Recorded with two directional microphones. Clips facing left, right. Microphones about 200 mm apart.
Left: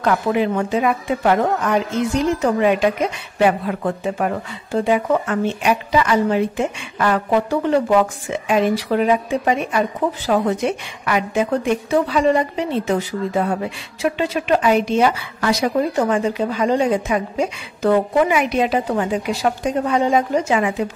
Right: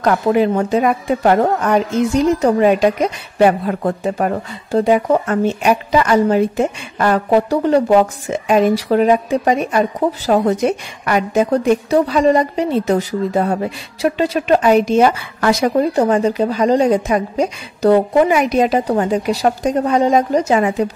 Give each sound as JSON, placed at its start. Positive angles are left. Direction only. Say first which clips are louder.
{"t": 0.0, "sound": "a woman's voice", "louder": "right 4 dB", "side_deg": -40}